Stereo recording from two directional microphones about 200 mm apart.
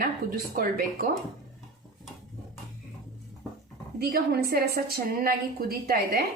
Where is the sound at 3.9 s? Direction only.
50° right (ahead or behind).